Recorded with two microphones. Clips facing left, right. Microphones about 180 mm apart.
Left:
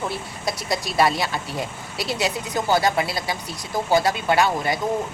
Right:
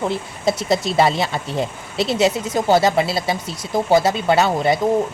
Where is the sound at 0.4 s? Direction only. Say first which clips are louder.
Right 8 dB; 25° right (ahead or behind).